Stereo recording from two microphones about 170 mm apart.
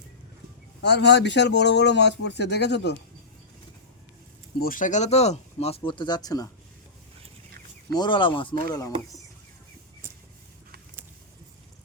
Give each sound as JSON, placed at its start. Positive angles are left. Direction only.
{"t": 0.8, "sound": "speech", "side_deg": 90}
{"t": 4.6, "sound": "speech", "side_deg": 50}
{"t": 7.9, "sound": "speech", "side_deg": 25}